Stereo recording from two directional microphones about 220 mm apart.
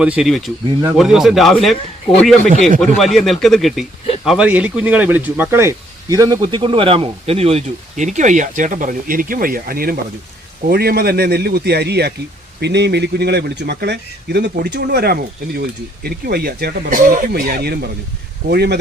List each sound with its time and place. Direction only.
0.0 s speech: 5° right (ahead or behind); by 18.8 s 45° right (ahead or behind)